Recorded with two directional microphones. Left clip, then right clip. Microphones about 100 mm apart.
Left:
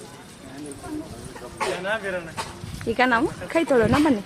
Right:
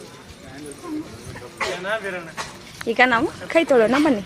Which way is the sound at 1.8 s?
5° right (ahead or behind).